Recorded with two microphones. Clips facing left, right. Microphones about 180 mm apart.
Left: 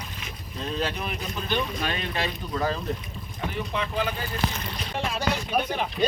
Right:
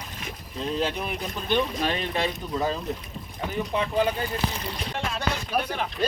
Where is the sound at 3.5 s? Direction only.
30° right (ahead or behind).